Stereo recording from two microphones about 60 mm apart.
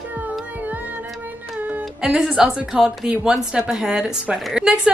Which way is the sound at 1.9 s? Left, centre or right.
Centre.